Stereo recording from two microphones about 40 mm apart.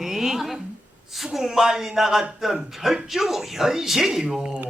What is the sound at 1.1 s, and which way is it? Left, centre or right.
A man's voice, centre.